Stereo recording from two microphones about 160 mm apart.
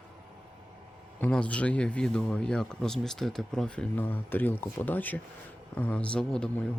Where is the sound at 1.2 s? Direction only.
5° left (ahead or behind).